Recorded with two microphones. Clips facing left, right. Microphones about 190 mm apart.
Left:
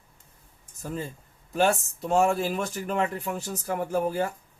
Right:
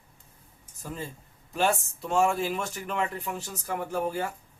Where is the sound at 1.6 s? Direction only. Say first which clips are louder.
Left 3 dB; 40° left (ahead or behind).